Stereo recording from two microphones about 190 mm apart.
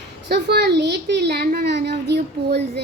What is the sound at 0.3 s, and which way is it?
A woman's voice, 55° right (ahead or behind).